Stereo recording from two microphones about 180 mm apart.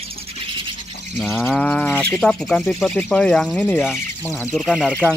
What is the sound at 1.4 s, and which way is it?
Speech, centre (ahead or behind).